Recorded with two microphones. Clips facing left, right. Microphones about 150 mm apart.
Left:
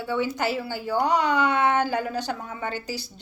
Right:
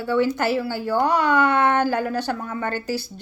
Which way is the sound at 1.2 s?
50° right (ahead or behind).